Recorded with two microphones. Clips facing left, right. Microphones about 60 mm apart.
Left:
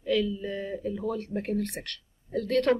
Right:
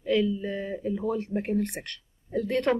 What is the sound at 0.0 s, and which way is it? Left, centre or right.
Speech, centre.